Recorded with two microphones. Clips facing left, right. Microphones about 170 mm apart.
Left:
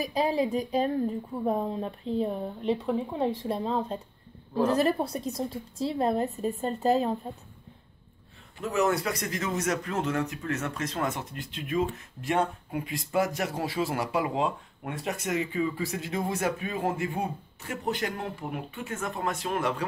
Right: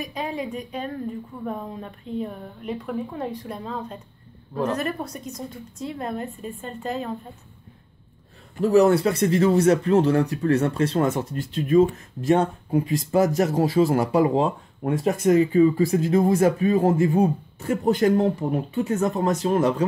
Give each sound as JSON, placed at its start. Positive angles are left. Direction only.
{"t": 0.0, "sound": "a woman's voice", "side_deg": 35}
{"t": 8.5, "sound": "speech", "side_deg": -35}
{"t": 11.3, "sound": "speech", "side_deg": -40}